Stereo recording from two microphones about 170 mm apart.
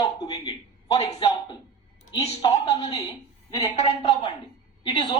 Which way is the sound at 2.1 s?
35° left (ahead or behind).